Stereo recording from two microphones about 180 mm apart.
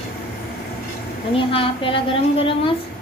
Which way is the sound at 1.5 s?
30° left (ahead or behind).